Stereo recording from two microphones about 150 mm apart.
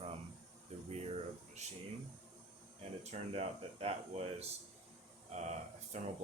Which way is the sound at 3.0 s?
45° right (ahead or behind).